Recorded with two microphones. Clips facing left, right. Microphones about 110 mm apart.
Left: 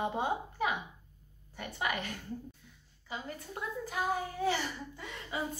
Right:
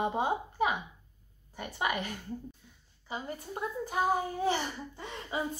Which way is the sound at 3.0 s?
25° right (ahead or behind).